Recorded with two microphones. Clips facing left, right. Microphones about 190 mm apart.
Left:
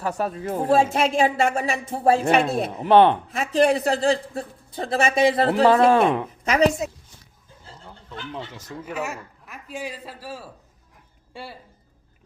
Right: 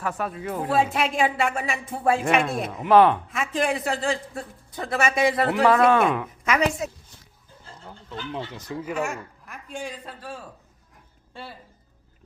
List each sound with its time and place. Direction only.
0.1 s speech: 40° left (ahead or behind)
0.7 s speech: 45° left (ahead or behind)
7.9 s goat: 5° right (ahead or behind)
8.9 s a man's voice: 5° left (ahead or behind)